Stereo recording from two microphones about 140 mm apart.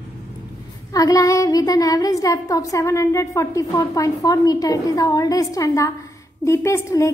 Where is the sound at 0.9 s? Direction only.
25° left (ahead or behind).